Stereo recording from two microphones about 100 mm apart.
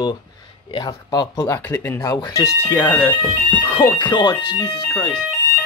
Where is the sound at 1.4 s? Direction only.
25° left (ahead or behind).